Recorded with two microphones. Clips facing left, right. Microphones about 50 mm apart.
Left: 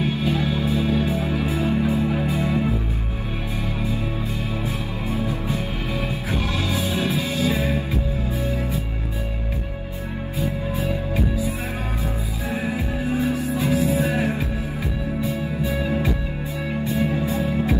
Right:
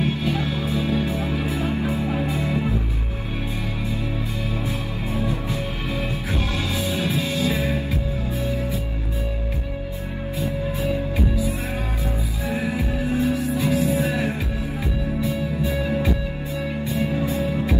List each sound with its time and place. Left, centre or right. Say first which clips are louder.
1.7 s music: left 3 dB; right
2.3 s music: left 2 dB; left
6.7 s music: left 1 dB; left
12.5 s music: right 1 dB; left
13.1 s music: right 1 dB; centre
13.4 s music: even; left
16.8 s music: left 3 dB; left